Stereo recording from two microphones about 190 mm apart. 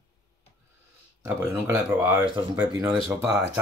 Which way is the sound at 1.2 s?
15° right (ahead or behind).